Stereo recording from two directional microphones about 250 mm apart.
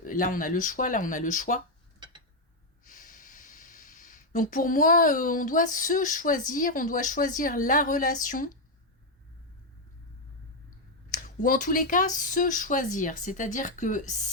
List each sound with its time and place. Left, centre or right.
0.0 s speech: left
2.0 s a sound: centre
2.8 s speech: left
11.1 s speech: left